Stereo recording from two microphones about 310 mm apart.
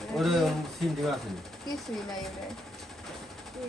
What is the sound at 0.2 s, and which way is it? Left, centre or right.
Speech, centre.